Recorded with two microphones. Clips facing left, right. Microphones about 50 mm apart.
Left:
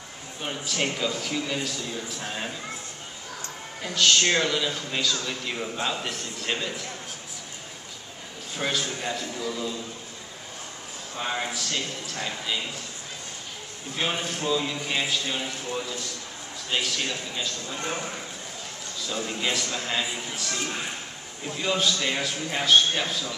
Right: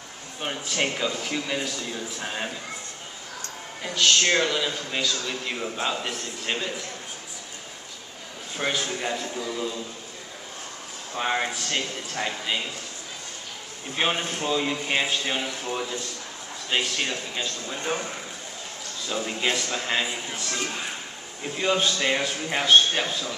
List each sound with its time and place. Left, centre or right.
0.4 s a man's voice: centre
3.8 s a man's voice: centre
8.5 s a man's voice: centre
11.1 s a man's voice: right
13.9 s a man's voice: right
17.7 s a man's voice: centre
19.0 s a man's voice: centre